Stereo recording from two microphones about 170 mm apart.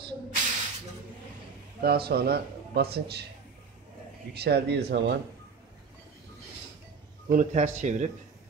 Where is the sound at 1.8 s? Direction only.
65° right (ahead or behind).